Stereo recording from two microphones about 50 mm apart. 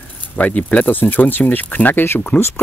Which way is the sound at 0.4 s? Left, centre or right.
Left.